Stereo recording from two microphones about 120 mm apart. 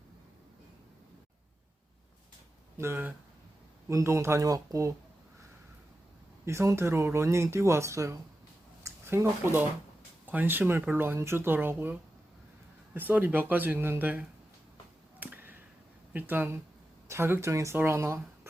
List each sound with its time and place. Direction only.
2.7 s speech: 20° right (ahead or behind)
6.4 s speech: 25° right (ahead or behind)
15.2 s a sound: 15° right (ahead or behind)
16.1 s speech: 15° right (ahead or behind)